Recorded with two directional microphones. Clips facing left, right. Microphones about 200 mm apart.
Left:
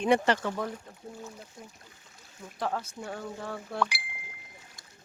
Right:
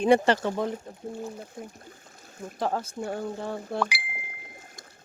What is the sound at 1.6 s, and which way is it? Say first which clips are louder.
Speech: right 8 dB; 55° right (ahead or behind).